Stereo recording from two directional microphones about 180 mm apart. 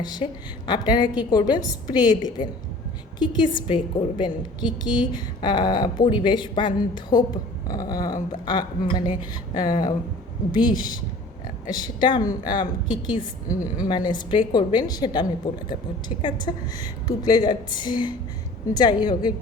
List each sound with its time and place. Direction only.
0.0 s a woman's voice: 25° left (ahead or behind)